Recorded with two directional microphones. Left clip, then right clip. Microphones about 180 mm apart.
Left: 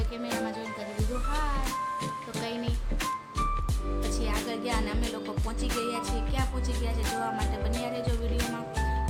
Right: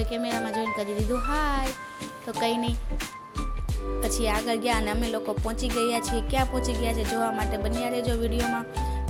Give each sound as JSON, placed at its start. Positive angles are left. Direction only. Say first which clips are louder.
{"t": 1.3, "sound": "music", "louder": "right 2 dB", "side_deg": -35}
{"t": 4.4, "sound": "music", "louder": "right 6 dB", "side_deg": -35}